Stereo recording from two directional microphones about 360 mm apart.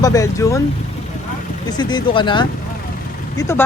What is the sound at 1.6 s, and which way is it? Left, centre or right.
Speech, centre.